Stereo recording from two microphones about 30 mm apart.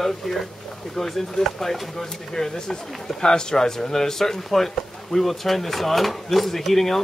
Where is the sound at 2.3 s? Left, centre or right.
Left.